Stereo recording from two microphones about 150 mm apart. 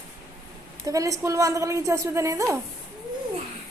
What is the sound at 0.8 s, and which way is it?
A woman's voice, 20° right (ahead or behind).